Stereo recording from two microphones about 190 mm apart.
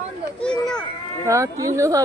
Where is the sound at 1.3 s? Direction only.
15° right (ahead or behind).